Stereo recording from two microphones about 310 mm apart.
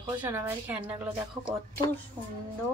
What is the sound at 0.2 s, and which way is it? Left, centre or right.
A woman's voice, centre.